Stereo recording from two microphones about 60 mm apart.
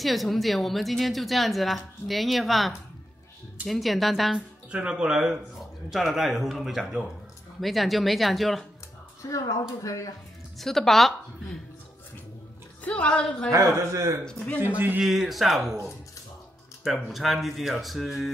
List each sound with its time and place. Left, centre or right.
0.0 s a woman's voice: centre
4.6 s a woman's voice: centre
9.3 s speech: left
10.6 s speech: centre
12.8 s a woman's voice: centre
13.7 s speech: right
14.6 s speech: right
15.0 s a woman's voice: centre
16.8 s a woman's voice: centre